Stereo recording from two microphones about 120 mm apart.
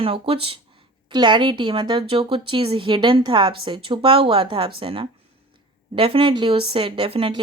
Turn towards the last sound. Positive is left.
turn(degrees=-50)  # may be behind; listen again after turning